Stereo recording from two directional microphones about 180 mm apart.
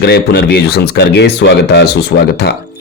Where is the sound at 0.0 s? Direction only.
65° left (ahead or behind).